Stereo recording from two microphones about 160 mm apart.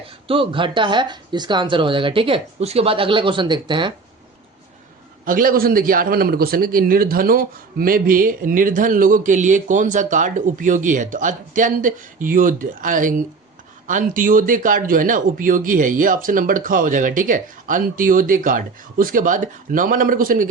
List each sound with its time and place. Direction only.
0.0 s speech: 35° right (ahead or behind)
5.2 s a man's voice: 60° right (ahead or behind)